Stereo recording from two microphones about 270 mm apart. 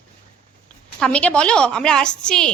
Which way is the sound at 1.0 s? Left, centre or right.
Centre.